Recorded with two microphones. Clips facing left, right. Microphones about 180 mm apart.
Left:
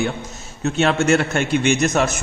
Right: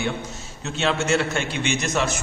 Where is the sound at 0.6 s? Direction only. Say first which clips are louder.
Left 6 dB; 50° left (ahead or behind).